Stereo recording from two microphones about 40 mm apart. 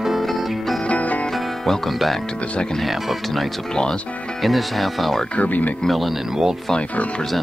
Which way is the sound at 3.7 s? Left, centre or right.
Centre.